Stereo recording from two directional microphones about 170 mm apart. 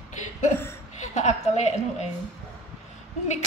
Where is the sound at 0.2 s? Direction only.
45° left (ahead or behind).